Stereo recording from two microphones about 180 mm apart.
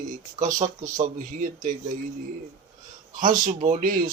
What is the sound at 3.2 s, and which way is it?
Speech, 45° right (ahead or behind).